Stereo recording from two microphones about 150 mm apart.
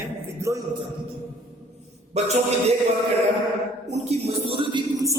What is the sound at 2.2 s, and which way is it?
Speech, 45° right (ahead or behind).